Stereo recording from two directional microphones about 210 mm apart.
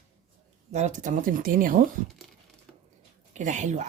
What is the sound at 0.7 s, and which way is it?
Speech, 35° right (ahead or behind).